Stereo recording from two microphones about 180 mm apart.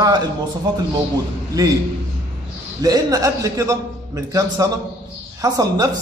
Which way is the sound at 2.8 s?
20° right (ahead or behind).